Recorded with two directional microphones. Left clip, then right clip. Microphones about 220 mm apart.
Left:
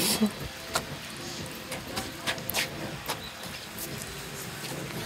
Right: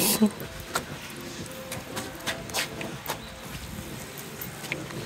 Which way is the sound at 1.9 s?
15° right (ahead or behind).